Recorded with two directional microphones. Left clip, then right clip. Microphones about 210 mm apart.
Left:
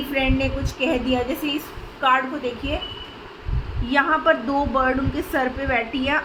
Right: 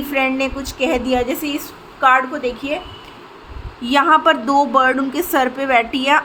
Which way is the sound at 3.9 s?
55° right (ahead or behind).